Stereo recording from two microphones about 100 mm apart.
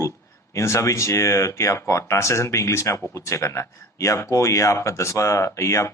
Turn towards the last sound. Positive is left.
turn(degrees=30)  # may be behind; listen again after turning